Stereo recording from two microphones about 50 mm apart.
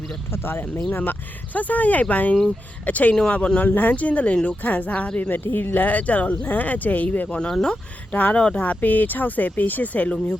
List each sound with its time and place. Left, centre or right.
0.3 s speech: left
7.3 s speech: centre
8.6 s speech: left